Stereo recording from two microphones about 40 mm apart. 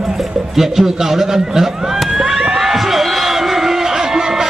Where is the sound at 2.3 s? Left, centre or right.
Centre.